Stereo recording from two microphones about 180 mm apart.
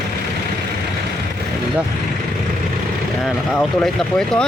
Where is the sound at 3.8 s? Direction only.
5° left (ahead or behind).